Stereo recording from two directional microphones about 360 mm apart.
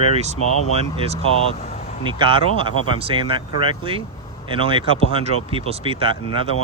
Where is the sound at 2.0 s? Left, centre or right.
Centre.